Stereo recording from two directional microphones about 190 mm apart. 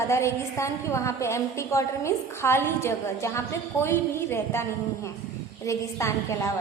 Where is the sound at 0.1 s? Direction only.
15° left (ahead or behind).